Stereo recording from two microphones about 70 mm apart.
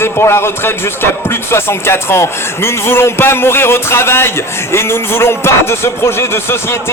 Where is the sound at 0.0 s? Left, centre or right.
Left.